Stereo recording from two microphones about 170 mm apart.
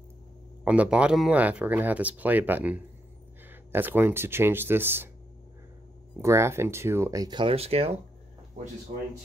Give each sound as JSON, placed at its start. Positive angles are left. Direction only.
{"t": 0.7, "sound": "speech", "side_deg": -5}
{"t": 6.2, "sound": "speech", "side_deg": -15}